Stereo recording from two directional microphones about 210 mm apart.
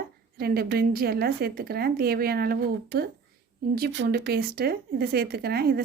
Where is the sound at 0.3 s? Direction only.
45° right (ahead or behind).